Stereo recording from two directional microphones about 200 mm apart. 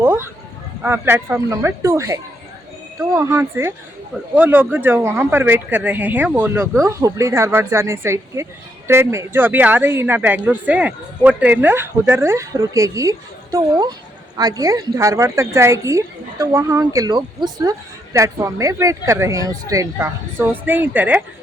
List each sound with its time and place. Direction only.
0.0 s a woman's voice: 10° right (ahead or behind)